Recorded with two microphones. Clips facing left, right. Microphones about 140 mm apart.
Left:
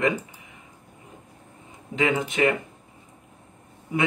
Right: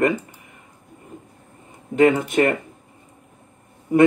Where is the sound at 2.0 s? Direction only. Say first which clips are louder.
Right 7 dB; 50° right (ahead or behind).